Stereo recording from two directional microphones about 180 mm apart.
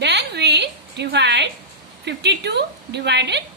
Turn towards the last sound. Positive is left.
turn(degrees=-70)  # may be behind; listen again after turning